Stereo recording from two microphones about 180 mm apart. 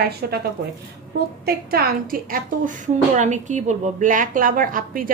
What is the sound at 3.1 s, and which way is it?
A woman's voice, 40° right (ahead or behind).